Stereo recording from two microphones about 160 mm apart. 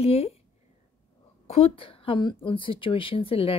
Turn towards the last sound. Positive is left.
turn(degrees=35)  # may be behind; listen again after turning